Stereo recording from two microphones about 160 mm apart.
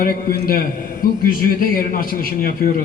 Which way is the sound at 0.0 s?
65° left (ahead or behind).